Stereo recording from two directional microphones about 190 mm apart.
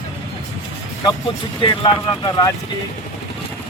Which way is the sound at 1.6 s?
25° left (ahead or behind).